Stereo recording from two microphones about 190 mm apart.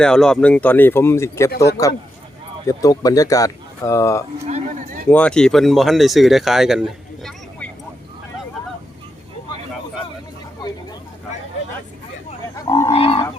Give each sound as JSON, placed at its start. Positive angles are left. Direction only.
{"t": 0.0, "sound": "speech", "side_deg": 5}
{"t": 4.4, "sound": "speech", "side_deg": -40}
{"t": 5.0, "sound": "speech", "side_deg": 10}
{"t": 12.6, "sound": "livestock", "side_deg": 15}
{"t": 12.9, "sound": "livestock", "side_deg": 30}